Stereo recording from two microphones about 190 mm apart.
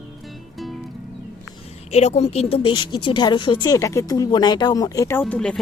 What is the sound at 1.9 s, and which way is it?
Speech, 35° left (ahead or behind).